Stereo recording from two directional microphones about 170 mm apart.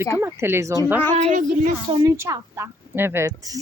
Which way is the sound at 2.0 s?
20° right (ahead or behind).